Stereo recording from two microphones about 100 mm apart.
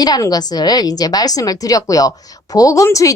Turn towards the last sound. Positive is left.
turn(degrees=35)  # may be behind; listen again after turning